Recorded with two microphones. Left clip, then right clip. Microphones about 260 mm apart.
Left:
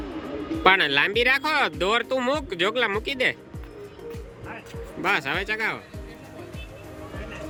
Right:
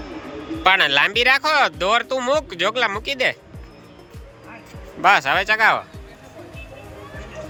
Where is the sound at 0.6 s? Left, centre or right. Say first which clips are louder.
Right 3 dB; centre.